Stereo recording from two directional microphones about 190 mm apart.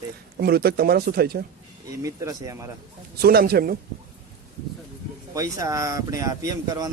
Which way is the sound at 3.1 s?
55° right (ahead or behind).